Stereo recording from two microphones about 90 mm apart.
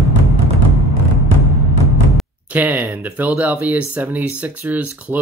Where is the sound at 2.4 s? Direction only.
20° right (ahead or behind).